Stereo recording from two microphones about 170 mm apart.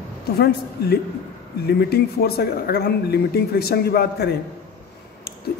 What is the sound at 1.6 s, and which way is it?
Speech, 70° left (ahead or behind).